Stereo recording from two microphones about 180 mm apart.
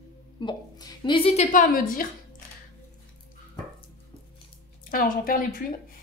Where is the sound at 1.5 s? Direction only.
50° left (ahead or behind).